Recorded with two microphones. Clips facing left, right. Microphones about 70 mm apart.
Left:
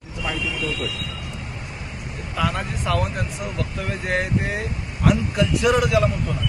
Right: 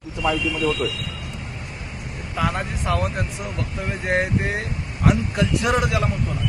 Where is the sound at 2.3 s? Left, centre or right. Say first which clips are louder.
Even; right.